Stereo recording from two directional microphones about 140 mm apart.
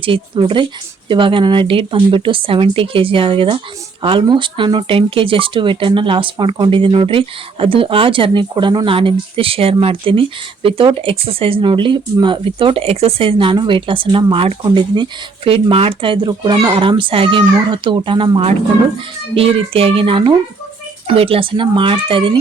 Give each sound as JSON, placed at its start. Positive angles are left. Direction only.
{"t": 0.0, "sound": "speech", "side_deg": -40}
{"t": 15.4, "sound": "speech", "side_deg": -45}